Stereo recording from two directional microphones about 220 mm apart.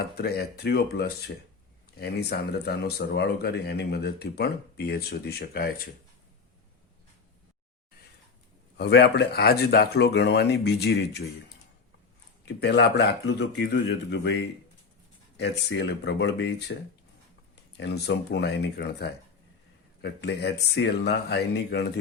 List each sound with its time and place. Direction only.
0.2 s speech: 45° left (ahead or behind)
8.8 s speech: 50° left (ahead or behind)
12.5 s speech: 50° left (ahead or behind)
17.7 s speech: 50° left (ahead or behind)